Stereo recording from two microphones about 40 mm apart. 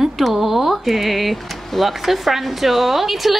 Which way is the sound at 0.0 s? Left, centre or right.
Centre.